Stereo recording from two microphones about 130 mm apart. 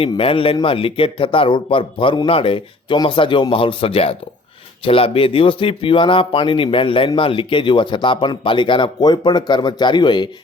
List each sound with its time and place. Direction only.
0.2 s a man's voice: 45° left (ahead or behind)